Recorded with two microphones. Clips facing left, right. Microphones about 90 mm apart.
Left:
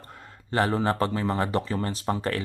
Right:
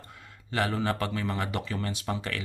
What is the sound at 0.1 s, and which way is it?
Speech, 40° left (ahead or behind).